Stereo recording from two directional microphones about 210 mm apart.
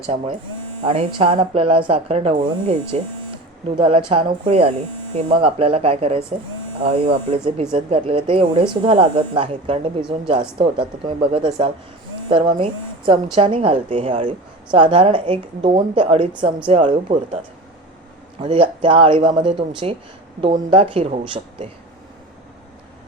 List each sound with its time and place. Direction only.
0.9 s a woman's voice: 25° right (ahead or behind)